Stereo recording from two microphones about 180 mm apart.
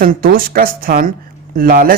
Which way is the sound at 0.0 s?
55° right (ahead or behind).